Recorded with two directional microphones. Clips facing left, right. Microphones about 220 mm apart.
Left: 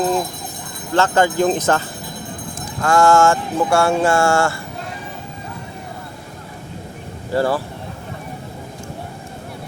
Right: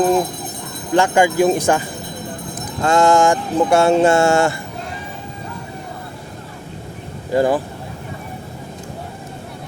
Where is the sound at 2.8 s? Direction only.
20° right (ahead or behind).